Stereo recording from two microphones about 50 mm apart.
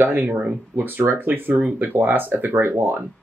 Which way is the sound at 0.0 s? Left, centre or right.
Right.